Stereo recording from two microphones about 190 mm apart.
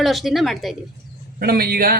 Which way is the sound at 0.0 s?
Centre (ahead or behind).